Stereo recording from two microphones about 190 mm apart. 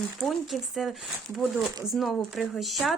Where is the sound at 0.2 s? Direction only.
Centre (ahead or behind).